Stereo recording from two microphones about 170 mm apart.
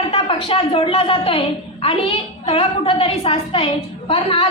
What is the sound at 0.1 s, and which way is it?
A woman's voice, 35° left (ahead or behind).